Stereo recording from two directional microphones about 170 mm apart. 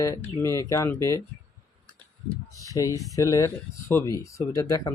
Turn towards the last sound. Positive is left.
turn(degrees=20)  # may be behind; listen again after turning